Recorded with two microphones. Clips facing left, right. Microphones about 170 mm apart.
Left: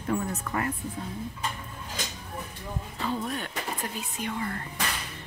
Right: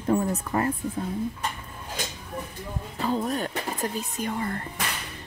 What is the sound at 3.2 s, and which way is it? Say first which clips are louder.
A woman's voice: right 5 dB; 40° right (ahead or behind).